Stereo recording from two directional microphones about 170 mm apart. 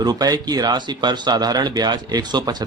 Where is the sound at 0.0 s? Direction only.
25° right (ahead or behind).